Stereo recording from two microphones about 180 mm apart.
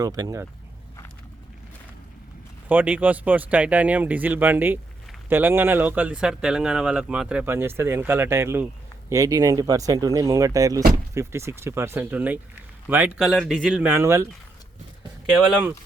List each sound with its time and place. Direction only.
0.0 s speech: 20° right (ahead or behind)
2.6 s speech: 10° right (ahead or behind)
15.4 s speech: 5° right (ahead or behind)